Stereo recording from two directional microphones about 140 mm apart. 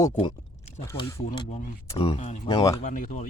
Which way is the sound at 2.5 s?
25° left (ahead or behind).